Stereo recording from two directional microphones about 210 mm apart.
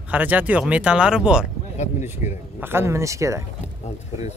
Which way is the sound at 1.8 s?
35° left (ahead or behind).